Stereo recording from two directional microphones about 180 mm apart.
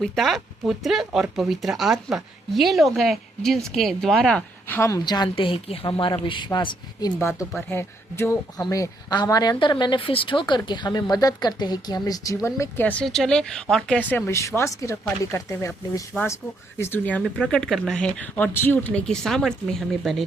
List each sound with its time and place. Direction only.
0.0 s speech: centre (ahead or behind); by 7.1 s 25° left (ahead or behind)
7.2 s speech: 15° left (ahead or behind)